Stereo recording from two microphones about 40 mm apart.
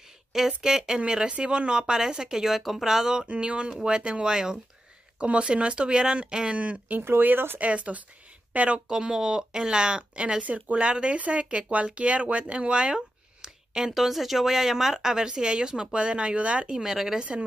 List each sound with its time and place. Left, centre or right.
0.6 s speech: centre
3.3 s speech: right
7.0 s speech: right
7.5 s speech: right
8.8 s speech: centre
10.4 s speech: right; by 13.9 s centre
13.9 s speech: centre; by 16.7 s right
16.7 s speech: centre
17.2 s speech: right